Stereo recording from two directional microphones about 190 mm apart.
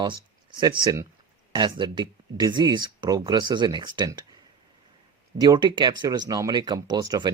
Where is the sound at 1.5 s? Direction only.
25° right (ahead or behind).